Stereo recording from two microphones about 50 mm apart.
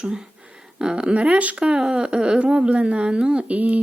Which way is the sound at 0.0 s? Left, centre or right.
Centre.